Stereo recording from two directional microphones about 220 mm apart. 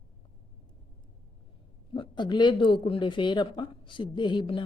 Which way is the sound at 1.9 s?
20° left (ahead or behind).